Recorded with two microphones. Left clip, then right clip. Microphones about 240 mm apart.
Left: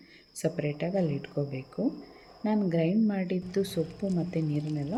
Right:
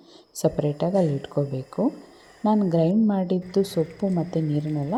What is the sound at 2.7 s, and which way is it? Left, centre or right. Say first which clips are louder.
A woman's voice: right 6 dB; right.